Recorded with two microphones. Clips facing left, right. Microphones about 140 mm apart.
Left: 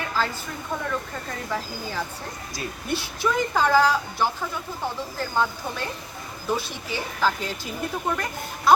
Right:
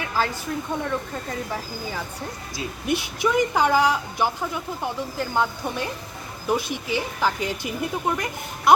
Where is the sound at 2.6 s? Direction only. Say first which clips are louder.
Right 4 dB; 15° right (ahead or behind).